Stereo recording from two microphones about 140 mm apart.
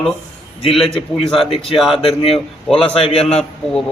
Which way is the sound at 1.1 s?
40° left (ahead or behind).